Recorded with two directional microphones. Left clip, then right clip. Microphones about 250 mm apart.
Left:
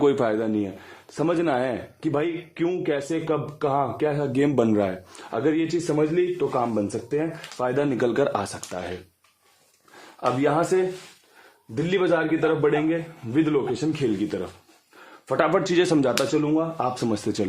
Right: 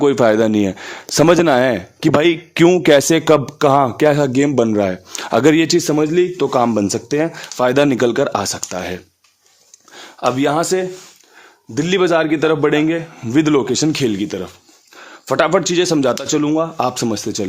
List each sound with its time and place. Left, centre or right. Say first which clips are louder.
0.2 s speech: right 11 dB; right
5.2 s a man's voice: right 11 dB; right
10.2 s a man's voice: right 6 dB; right
14.2 s a man's voice: right 5 dB; right